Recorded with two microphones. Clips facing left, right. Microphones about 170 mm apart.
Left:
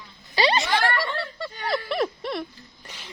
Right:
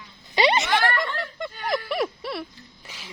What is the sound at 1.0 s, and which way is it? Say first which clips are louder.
Fowl: even; 20° right (ahead or behind).